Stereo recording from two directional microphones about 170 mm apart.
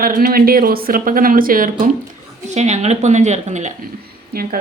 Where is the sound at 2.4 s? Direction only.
40° right (ahead or behind).